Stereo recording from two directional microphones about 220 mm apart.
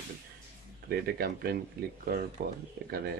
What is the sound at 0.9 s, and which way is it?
Speech, 45° right (ahead or behind).